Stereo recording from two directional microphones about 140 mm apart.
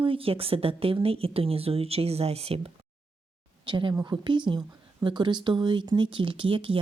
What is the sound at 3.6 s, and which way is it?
Speech, 35° right (ahead or behind).